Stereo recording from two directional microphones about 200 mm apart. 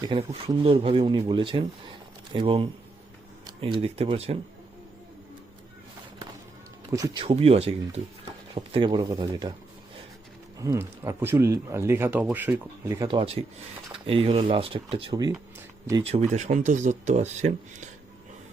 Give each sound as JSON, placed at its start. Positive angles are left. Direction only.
{"t": 0.1, "sound": "speech", "side_deg": -25}
{"t": 6.9, "sound": "speech", "side_deg": -15}
{"t": 7.3, "sound": "speech", "side_deg": -30}
{"t": 10.6, "sound": "speech", "side_deg": -15}
{"t": 16.0, "sound": "speech", "side_deg": -35}